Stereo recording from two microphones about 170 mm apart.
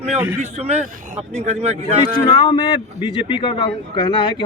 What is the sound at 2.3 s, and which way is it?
Speech, 30° left (ahead or behind).